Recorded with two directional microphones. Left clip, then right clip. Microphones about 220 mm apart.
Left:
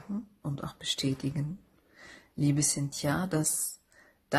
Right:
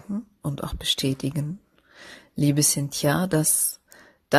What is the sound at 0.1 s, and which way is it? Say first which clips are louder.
Whispering: right 7 dB; 30° right (ahead or behind).